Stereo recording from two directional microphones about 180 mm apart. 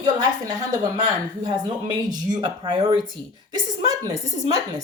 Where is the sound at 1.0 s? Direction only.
25° right (ahead or behind).